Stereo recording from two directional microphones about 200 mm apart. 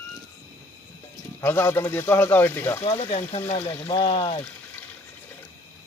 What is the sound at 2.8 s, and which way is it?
Speech, 30° left (ahead or behind).